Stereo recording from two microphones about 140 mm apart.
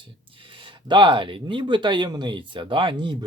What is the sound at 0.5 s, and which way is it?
Speech, 35° right (ahead or behind).